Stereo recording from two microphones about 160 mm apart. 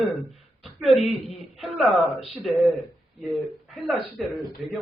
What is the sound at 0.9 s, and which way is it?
Speech, 40° left (ahead or behind).